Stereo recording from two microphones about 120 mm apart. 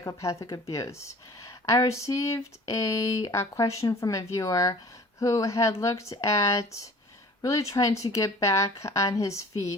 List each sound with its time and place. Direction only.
0.0 s speech: 25° left (ahead or behind)